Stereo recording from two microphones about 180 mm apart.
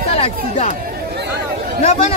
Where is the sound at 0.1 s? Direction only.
35° left (ahead or behind).